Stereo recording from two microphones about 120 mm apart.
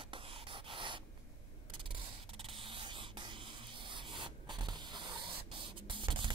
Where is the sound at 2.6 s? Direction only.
45° right (ahead or behind).